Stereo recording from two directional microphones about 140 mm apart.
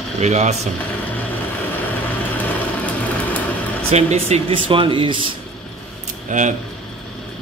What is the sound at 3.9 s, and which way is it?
Speech, 50° right (ahead or behind).